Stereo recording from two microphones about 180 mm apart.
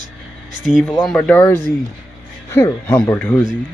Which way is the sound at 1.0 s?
Centre (ahead or behind).